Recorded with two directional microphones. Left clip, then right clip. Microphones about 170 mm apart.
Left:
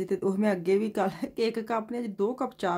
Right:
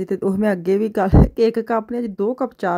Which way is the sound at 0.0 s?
35° right (ahead or behind).